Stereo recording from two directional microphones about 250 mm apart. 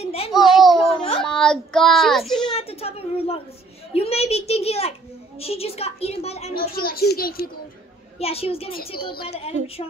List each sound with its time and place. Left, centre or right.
0.0 s a sound: left
0.3 s a sound: centre
0.8 s baby cry: left
1.2 s speech: centre
2.5 s a woman's voice: left
6.7 s speech: left
8.2 s a woman's voice: left